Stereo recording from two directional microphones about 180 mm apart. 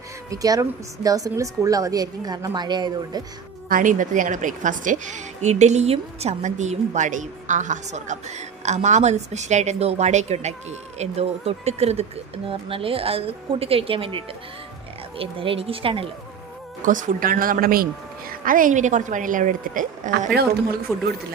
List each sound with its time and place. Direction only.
0.3 s a woman's voice: 20° right (ahead or behind)
3.7 s a woman's voice: 45° right (ahead or behind); by 14.2 s 30° right (ahead or behind)
15.2 s a woman's voice: 30° right (ahead or behind)
16.8 s a woman's voice: 45° right (ahead or behind)